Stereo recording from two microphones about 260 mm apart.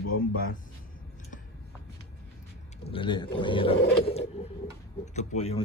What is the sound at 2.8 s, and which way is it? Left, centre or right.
Speech, centre.